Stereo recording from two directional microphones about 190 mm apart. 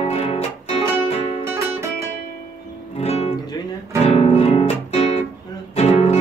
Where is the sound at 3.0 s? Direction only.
35° left (ahead or behind).